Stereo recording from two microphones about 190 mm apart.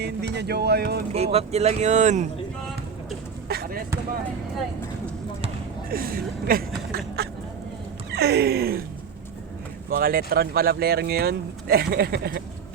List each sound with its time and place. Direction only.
0.0 s speech: 60° right (ahead or behind)
1.1 s speech: 30° right (ahead or behind)
3.5 s a sound: 50° right (ahead or behind)
5.9 s speech: 50° right (ahead or behind)
8.1 s speech: 60° right (ahead or behind)
9.9 s speech: 50° right (ahead or behind)